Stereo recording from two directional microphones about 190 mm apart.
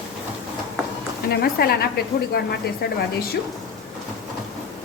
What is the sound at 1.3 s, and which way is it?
A woman's voice, 55° left (ahead or behind).